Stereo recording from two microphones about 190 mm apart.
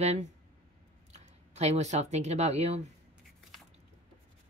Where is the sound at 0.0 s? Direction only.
35° right (ahead or behind).